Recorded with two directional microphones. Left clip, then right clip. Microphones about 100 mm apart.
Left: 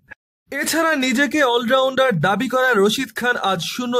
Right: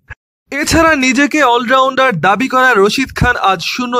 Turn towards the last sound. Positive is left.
turn(degrees=-25)  # may be behind; listen again after turning